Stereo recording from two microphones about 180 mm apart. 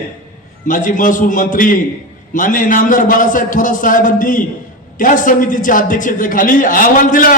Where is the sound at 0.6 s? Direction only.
45° left (ahead or behind).